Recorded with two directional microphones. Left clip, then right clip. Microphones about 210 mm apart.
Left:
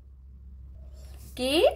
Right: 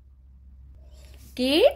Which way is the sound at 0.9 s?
30° right (ahead or behind).